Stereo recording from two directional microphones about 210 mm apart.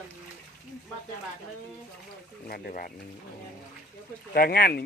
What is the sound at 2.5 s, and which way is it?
Speech, 45° left (ahead or behind).